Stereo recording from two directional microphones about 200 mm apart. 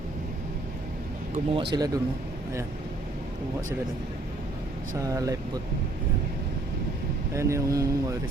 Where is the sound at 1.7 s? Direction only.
20° right (ahead or behind).